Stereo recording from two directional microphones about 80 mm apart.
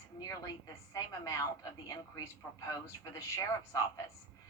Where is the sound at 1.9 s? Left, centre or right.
Left.